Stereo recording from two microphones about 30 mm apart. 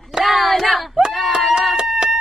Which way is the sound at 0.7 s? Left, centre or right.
Centre.